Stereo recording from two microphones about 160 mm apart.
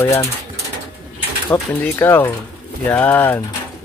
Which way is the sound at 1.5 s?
15° left (ahead or behind).